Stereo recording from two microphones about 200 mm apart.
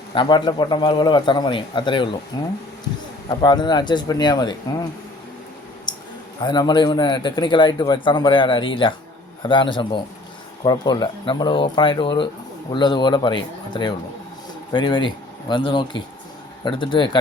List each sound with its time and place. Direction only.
0.1 s a man's voice: 25° left (ahead or behind)
5.9 s a sound: 20° left (ahead or behind)
6.4 s a man's voice: 20° left (ahead or behind)